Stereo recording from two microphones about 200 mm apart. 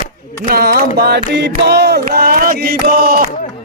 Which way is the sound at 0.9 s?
55° right (ahead or behind).